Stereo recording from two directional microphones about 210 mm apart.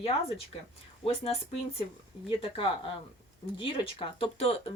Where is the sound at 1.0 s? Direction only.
30° left (ahead or behind).